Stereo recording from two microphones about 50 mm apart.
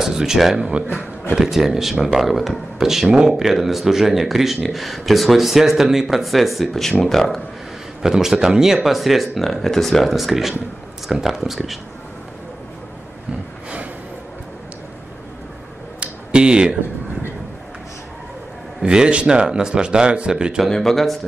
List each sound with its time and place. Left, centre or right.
0.0 s speech: centre
0.7 s a man's voice: right
1.3 s speech: centre
3.1 s a man's voice: centre
3.3 s speech: centre
8.0 s speech: centre
16.0 s a sound: right
18.8 s speech: centre
20.7 s speech: centre